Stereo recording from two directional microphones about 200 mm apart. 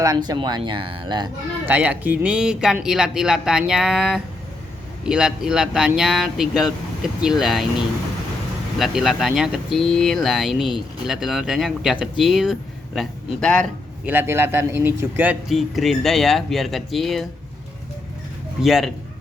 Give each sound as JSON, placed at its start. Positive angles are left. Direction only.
{"t": 0.0, "sound": "speech", "side_deg": -20}
{"t": 1.6, "sound": "speech", "side_deg": -10}
{"t": 8.8, "sound": "speech", "side_deg": 0}
{"t": 14.0, "sound": "speech", "side_deg": -10}
{"t": 18.6, "sound": "speech", "side_deg": 0}